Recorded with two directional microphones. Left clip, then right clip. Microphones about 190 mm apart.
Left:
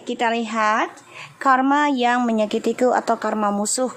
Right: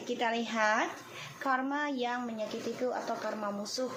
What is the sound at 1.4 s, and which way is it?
A woman's voice, 45° left (ahead or behind).